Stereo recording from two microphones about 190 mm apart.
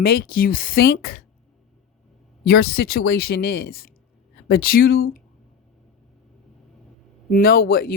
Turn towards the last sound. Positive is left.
turn(degrees=50)  # may be behind; listen again after turning